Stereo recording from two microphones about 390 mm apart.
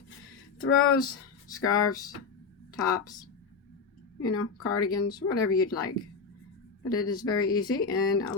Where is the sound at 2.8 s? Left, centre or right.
Centre.